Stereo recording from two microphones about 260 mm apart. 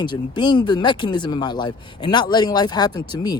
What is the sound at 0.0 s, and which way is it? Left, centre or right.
Speech, centre.